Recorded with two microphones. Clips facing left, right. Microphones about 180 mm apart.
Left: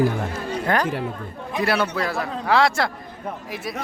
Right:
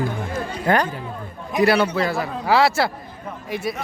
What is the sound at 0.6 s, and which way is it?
A man's voice, centre (ahead or behind).